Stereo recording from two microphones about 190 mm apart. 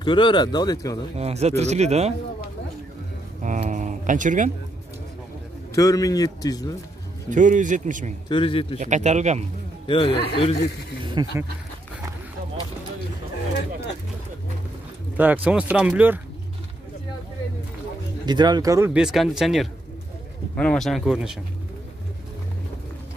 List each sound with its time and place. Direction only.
0.0 s speech: 25° left (ahead or behind)
1.1 s speech: 35° right (ahead or behind)
3.4 s speech: 40° right (ahead or behind)
5.8 s speech: 15° left (ahead or behind)
7.2 s speech: 40° right (ahead or behind)
8.3 s speech: 25° left (ahead or behind)
8.7 s speech: 40° right (ahead or behind)
9.8 s a man's voice: 30° left (ahead or behind)
10.1 s a man's voice: 60° left (ahead or behind)
11.2 s speech: 20° right (ahead or behind)
15.1 s speech: 10° right (ahead or behind)
18.2 s speech: 20° right (ahead or behind)
18.9 s speech: 5° right (ahead or behind)